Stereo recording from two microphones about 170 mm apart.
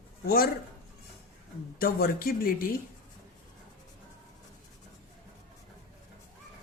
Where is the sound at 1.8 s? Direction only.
60° left (ahead or behind).